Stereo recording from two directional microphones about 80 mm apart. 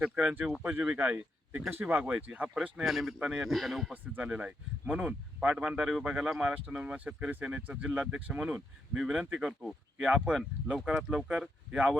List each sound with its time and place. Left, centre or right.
0.0 s speech: centre
0.6 s speech: right
2.6 s speech: centre
3.4 s speech: centre
3.9 s speech: centre
10.0 s speech: centre